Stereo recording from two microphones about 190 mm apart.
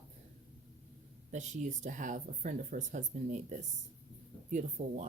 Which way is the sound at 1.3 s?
40° right (ahead or behind).